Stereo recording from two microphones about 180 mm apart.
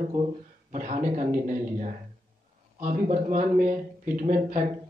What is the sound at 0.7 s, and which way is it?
Speech, 45° right (ahead or behind).